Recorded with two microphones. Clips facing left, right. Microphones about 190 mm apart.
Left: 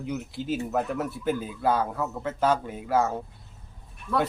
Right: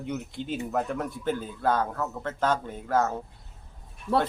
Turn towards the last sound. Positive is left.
turn(degrees=-40)  # may be behind; listen again after turning